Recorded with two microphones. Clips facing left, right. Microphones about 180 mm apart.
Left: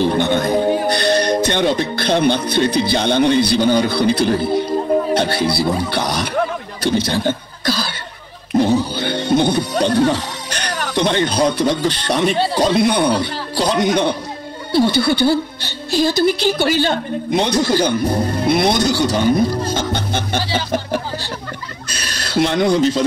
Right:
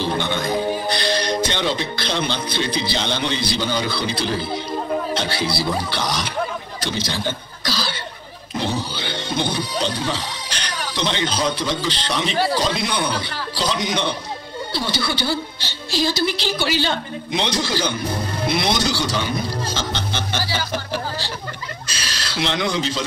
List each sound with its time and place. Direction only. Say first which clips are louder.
0.0 s a woman's voice: left 7 dB; 50° left (ahead or behind)
8.5 s music: left 10 dB; 50° left (ahead or behind)
12.5 s a man's voice: left 7 dB; 55° left (ahead or behind)
22.3 s a woman's voice: left 8 dB; 50° left (ahead or behind)